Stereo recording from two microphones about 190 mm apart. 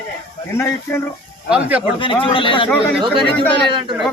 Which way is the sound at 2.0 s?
25° left (ahead or behind).